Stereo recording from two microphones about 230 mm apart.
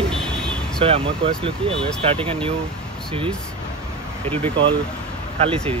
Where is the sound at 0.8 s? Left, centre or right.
Right.